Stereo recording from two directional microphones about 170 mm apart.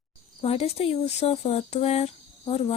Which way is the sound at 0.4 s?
35° left (ahead or behind).